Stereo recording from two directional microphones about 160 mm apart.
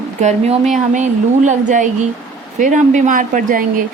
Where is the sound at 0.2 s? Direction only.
45° right (ahead or behind).